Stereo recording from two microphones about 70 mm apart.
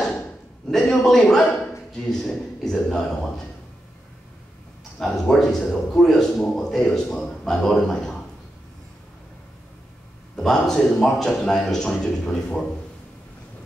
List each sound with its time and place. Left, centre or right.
0.7 s a man's voice: centre
4.9 s a man's voice: centre
10.3 s a man's voice: centre